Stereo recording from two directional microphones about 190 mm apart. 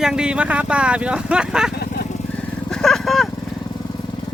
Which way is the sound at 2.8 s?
Centre (ahead or behind).